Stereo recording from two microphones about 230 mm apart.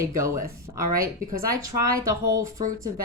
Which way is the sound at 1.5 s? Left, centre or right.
Centre.